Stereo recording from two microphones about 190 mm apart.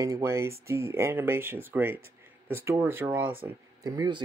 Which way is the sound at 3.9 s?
25° right (ahead or behind).